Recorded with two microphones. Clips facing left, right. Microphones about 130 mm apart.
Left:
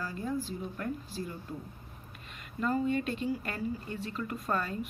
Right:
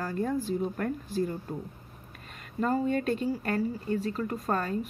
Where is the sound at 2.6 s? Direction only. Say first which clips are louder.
Right 3 dB; 40° right (ahead or behind).